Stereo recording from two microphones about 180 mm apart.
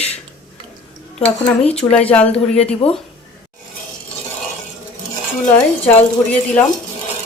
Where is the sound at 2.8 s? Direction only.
35° left (ahead or behind).